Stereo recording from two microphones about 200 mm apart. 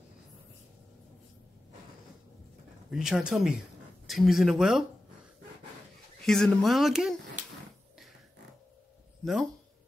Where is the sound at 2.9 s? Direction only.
Centre (ahead or behind).